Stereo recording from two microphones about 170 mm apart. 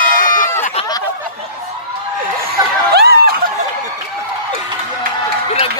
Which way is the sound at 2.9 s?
75° right (ahead or behind).